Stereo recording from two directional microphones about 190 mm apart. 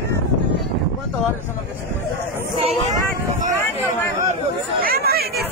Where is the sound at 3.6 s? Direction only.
15° left (ahead or behind).